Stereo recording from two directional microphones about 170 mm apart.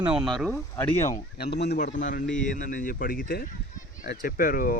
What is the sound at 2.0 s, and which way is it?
Speech, 50° left (ahead or behind).